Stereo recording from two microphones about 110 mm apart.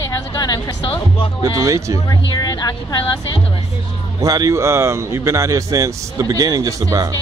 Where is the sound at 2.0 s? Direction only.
35° left (ahead or behind).